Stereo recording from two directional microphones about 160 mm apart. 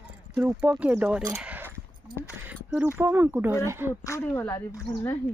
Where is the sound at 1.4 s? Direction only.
10° right (ahead or behind).